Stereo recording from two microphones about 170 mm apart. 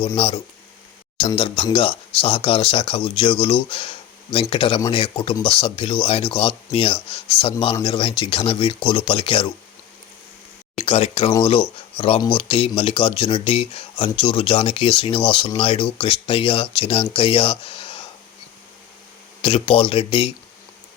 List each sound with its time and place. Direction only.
1.7 s speech: 35° left (ahead or behind)
10.8 s speech: 35° left (ahead or behind)
19.4 s speech: 30° left (ahead or behind)